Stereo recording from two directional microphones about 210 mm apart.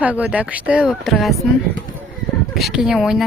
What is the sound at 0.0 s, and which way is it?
A woman's voice, 5° right (ahead or behind).